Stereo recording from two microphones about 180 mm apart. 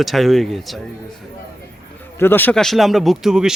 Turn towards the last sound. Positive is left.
turn(degrees=-5)  # may be behind; listen again after turning